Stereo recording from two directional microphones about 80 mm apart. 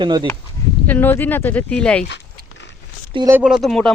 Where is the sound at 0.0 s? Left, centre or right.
Right.